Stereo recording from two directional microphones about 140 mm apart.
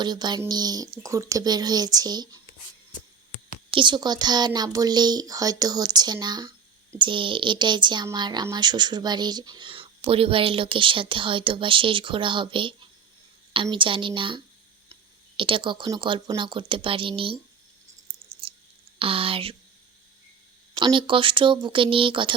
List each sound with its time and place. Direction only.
0.0 s speech: 30° right (ahead or behind)
3.7 s speech: 35° right (ahead or behind)
18.4 s a sound: 40° right (ahead or behind)
18.9 s speech: 40° right (ahead or behind)
20.7 s speech: 35° right (ahead or behind)